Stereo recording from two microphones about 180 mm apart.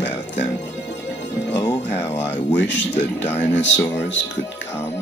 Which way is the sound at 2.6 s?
80° left.